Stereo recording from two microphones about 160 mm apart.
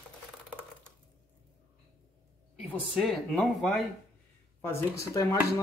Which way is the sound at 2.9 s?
Centre (ahead or behind).